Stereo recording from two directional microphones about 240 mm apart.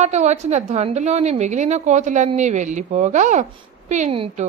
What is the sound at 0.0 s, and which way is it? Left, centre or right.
A woman's voice, right.